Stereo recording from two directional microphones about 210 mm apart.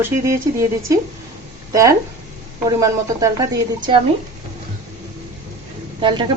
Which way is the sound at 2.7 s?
15° right (ahead or behind).